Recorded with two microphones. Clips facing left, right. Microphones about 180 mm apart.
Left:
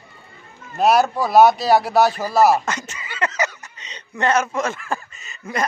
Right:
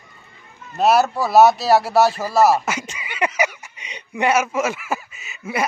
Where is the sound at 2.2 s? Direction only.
Centre (ahead or behind).